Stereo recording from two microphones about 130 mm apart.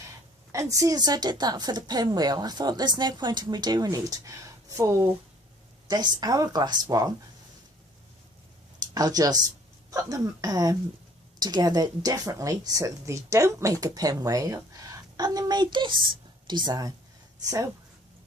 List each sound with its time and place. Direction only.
0.5 s a woman's voice: 25° right (ahead or behind)
9.0 s a woman's voice: 30° right (ahead or behind)